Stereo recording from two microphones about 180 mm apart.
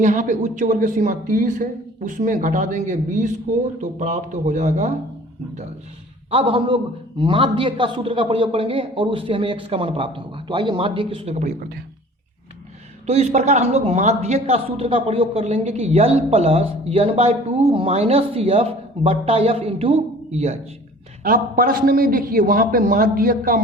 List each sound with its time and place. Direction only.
0.0 s speech: 45° right (ahead or behind)
6.3 s a man's voice: 30° right (ahead or behind)
13.1 s speech: 35° right (ahead or behind)
21.2 s speech: 50° right (ahead or behind)